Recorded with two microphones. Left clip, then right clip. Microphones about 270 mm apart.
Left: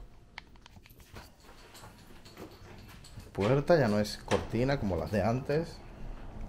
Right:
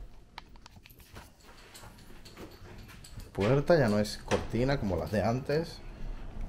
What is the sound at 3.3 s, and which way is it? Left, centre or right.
Speech, centre.